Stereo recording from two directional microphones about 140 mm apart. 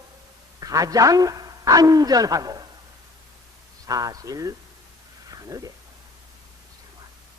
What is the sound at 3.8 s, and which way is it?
Speech, 25° right (ahead or behind).